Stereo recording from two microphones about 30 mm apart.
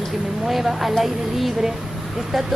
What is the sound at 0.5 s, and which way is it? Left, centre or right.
A woman's voice, centre.